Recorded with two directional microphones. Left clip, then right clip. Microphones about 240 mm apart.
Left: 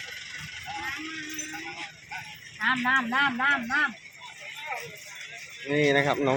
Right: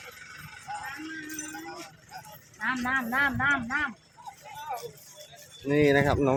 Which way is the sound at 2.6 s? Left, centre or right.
Left.